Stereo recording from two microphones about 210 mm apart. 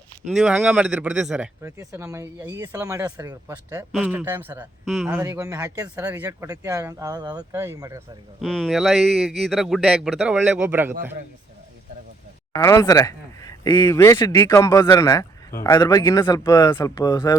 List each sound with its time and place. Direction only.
0.3 s a man's voice: 5° right (ahead or behind)
1.6 s a man's voice: 15° right (ahead or behind)
8.4 s a man's voice: centre (ahead or behind)
12.5 s speech: 15° left (ahead or behind)